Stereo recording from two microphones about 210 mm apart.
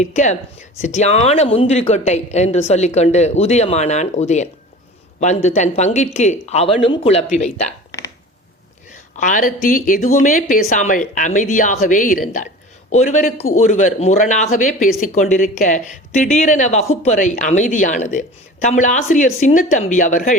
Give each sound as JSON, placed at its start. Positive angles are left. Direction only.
{"t": 0.0, "sound": "speech", "side_deg": 35}
{"t": 9.1, "sound": "speech", "side_deg": 40}